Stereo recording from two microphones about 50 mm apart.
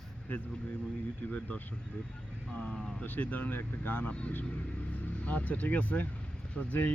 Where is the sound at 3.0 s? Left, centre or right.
Left.